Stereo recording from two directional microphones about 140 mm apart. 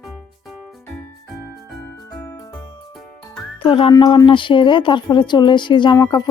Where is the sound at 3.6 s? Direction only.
40° left (ahead or behind).